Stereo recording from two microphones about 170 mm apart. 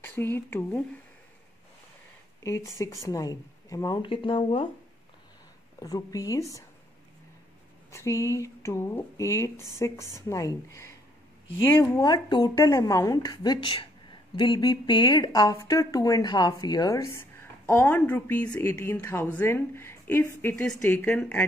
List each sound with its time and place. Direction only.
0.0 s a woman's voice: 15° left (ahead or behind)
2.4 s speech: 20° left (ahead or behind)
5.8 s speech: 20° left (ahead or behind)
7.9 s a woman's voice: 15° left (ahead or behind)